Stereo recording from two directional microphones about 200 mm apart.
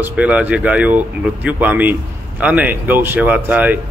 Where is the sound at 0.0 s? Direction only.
5° right (ahead or behind).